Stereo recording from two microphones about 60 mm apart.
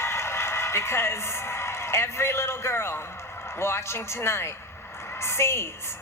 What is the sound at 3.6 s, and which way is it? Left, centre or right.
A man's voice, left.